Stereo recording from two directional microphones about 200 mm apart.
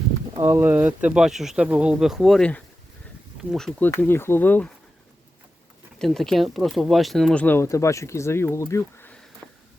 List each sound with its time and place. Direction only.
0.3 s speech: 15° right (ahead or behind); by 4.7 s 10° left (ahead or behind)
6.0 s speech: centre (ahead or behind)
9.4 s a sound: 5° left (ahead or behind)